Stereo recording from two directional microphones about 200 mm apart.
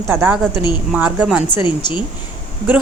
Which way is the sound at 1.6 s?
25° left (ahead or behind).